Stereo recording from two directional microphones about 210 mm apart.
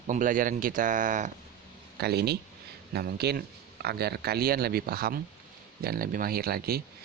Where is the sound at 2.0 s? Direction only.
50° right (ahead or behind).